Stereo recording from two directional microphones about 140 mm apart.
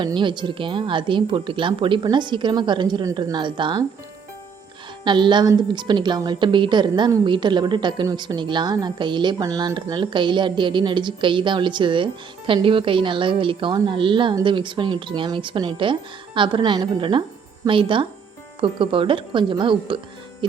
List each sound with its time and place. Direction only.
0.0 s a woman's voice: 35° right (ahead or behind)
5.0 s a woman's voice: 35° right (ahead or behind)